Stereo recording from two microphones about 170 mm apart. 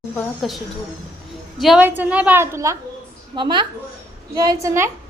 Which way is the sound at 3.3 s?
25° right (ahead or behind).